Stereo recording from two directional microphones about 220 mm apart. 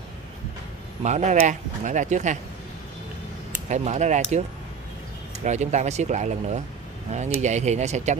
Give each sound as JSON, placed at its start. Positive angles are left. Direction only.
{"t": 1.0, "sound": "speech", "side_deg": -30}
{"t": 3.6, "sound": "speech", "side_deg": -30}